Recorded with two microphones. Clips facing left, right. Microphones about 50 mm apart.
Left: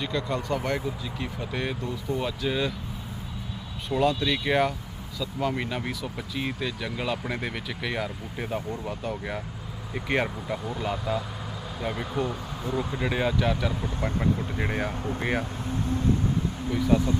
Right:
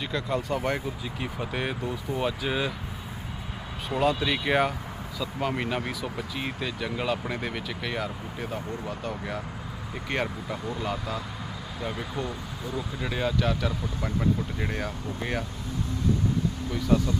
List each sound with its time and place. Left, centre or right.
0.0 s speech: centre
3.9 s speech: centre
5.8 s speech: centre
8.4 s speech: centre
12.2 s speech: centre
16.7 s speech: centre